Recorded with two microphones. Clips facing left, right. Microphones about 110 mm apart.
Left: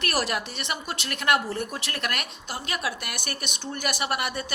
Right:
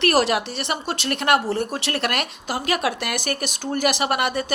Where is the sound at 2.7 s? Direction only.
75° right (ahead or behind); by 4.4 s 55° right (ahead or behind).